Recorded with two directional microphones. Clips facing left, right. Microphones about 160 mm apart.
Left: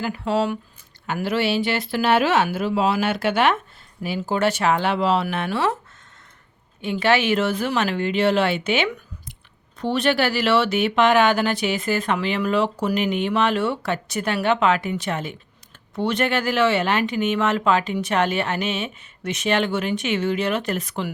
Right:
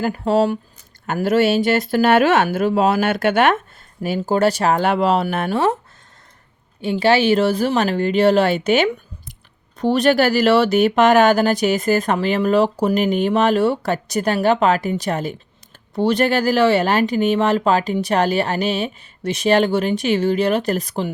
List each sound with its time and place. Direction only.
0.0 s speech: 40° right (ahead or behind)
1.0 s speech: 45° right (ahead or behind)
6.8 s speech: 30° right (ahead or behind)